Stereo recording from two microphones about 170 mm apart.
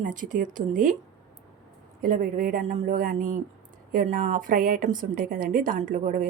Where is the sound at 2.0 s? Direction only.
55° right (ahead or behind).